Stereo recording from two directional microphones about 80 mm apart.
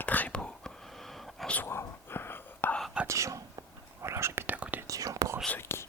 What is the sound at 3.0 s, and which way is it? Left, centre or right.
Whispering, right.